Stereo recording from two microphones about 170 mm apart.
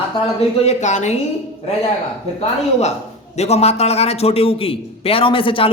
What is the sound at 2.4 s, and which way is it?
A man's voice, 40° left (ahead or behind).